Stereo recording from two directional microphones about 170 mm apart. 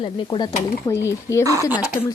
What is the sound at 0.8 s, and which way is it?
Speech, 15° left (ahead or behind).